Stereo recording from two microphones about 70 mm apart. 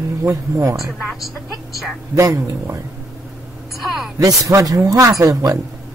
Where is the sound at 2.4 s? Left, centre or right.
Right.